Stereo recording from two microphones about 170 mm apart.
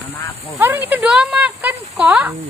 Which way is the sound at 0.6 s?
10° right (ahead or behind).